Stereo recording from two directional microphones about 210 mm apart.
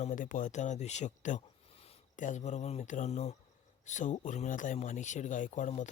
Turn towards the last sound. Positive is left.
turn(degrees=35)  # may be behind; listen again after turning